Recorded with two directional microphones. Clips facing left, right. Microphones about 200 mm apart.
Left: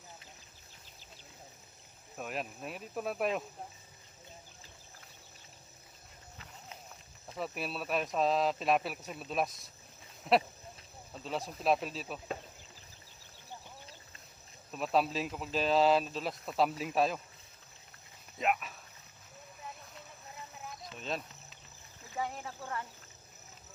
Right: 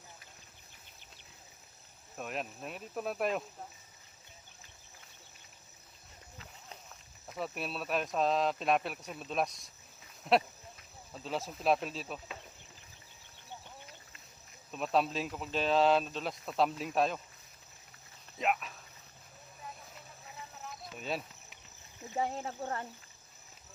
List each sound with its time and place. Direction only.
2.1 s speech: centre (ahead or behind)
7.3 s speech: centre (ahead or behind)
14.7 s speech: centre (ahead or behind)
18.3 s speech: centre (ahead or behind)
20.7 s cricket: 5° right (ahead or behind)
22.1 s speech: 30° right (ahead or behind)